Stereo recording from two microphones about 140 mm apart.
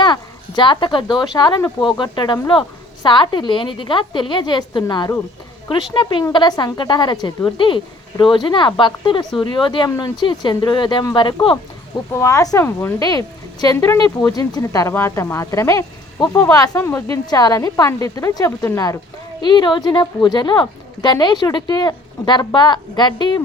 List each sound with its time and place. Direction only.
0.0 s speech: 35° left (ahead or behind)
12.1 s speech: 20° left (ahead or behind)
13.1 s speech: 25° left (ahead or behind)
13.7 s speech: 15° left (ahead or behind)
19.4 s speech: 35° left (ahead or behind)